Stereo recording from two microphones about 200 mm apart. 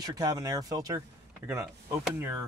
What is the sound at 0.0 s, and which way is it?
Speech, 20° right (ahead or behind).